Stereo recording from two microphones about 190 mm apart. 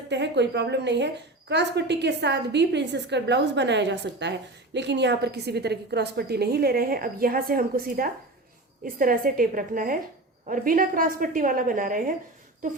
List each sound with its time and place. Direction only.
0.1 s a woman's voice: 65° right (ahead or behind); by 12.1 s 45° right (ahead or behind)